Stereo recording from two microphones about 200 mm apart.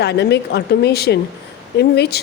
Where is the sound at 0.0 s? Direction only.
55° left (ahead or behind).